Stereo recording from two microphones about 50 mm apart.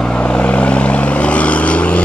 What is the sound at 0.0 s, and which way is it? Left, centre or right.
Vehicle, left.